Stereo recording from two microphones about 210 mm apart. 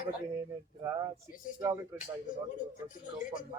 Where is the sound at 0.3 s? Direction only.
15° right (ahead or behind).